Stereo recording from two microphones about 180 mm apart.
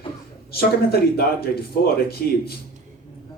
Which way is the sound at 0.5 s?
60° left (ahead or behind).